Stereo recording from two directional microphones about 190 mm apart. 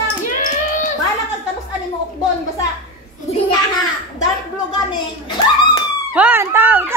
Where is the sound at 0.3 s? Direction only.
45° left (ahead or behind).